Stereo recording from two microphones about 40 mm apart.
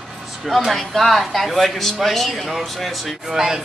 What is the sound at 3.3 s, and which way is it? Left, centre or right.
Speech, centre.